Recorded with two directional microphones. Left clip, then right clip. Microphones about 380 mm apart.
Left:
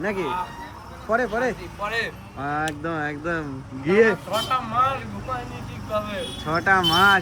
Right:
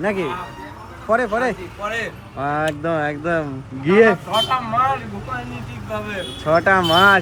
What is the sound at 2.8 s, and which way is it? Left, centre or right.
Speech, centre.